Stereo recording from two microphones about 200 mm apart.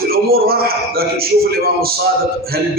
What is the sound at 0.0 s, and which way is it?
A man's voice, 50° right (ahead or behind).